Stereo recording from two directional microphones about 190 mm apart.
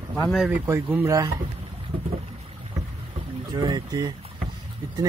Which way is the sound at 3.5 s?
20° right (ahead or behind).